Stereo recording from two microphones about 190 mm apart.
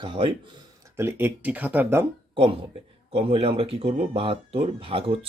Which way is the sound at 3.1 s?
30° right (ahead or behind).